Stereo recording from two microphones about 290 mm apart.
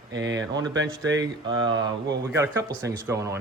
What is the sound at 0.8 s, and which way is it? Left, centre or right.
Speech, right.